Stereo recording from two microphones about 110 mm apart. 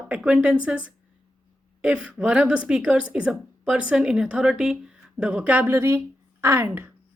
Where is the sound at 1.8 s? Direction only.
10° right (ahead or behind).